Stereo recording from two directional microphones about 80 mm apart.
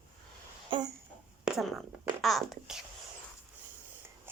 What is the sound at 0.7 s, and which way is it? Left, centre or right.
Speech, right.